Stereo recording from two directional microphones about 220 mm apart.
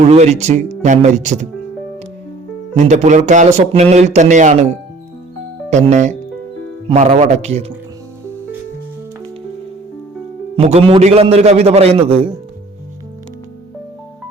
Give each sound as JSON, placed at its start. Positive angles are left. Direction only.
{"t": 0.0, "sound": "speech", "side_deg": -30}
{"t": 2.7, "sound": "speech", "side_deg": -30}
{"t": 5.7, "sound": "a man's voice", "side_deg": -30}
{"t": 10.6, "sound": "a man's voice", "side_deg": -25}